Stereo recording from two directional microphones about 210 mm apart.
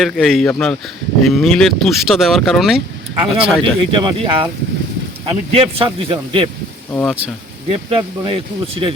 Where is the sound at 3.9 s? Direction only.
25° right (ahead or behind).